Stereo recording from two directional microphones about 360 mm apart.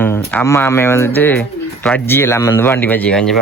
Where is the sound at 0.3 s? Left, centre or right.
Centre.